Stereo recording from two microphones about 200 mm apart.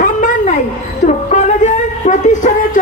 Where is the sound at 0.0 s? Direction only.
40° left (ahead or behind).